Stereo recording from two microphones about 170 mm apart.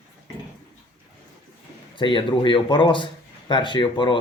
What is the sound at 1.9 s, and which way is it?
Speech, 30° left (ahead or behind).